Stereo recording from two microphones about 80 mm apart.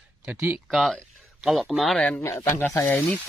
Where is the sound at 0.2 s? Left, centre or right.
Right.